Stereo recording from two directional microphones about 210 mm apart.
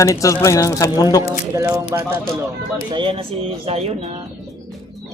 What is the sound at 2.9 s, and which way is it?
Speech, 25° right (ahead or behind).